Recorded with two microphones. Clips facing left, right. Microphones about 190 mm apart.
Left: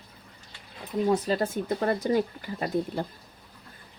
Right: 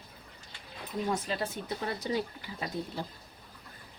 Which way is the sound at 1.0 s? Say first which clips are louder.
Left 8 dB; 40° left (ahead or behind).